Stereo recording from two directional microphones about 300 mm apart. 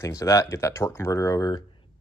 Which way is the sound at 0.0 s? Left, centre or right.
Centre.